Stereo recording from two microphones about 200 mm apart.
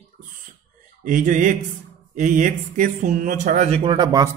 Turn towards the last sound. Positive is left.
turn(degrees=-20)  # may be behind; listen again after turning